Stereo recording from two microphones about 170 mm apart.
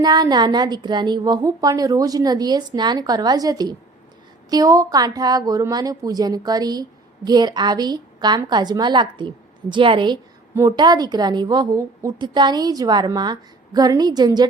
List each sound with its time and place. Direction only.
0.0 s a woman's voice: 25° right (ahead or behind)